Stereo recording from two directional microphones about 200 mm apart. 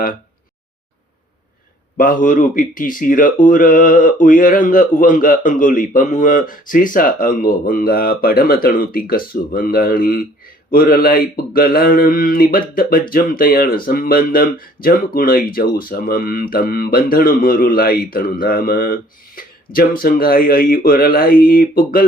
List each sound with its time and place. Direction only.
2.0 s speech: 45° left (ahead or behind)